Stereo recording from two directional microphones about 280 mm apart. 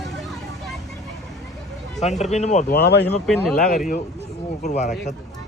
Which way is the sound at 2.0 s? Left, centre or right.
Left.